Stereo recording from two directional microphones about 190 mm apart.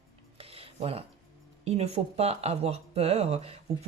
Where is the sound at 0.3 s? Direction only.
30° right (ahead or behind).